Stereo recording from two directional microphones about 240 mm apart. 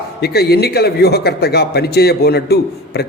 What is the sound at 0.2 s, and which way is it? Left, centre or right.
A man's voice, left.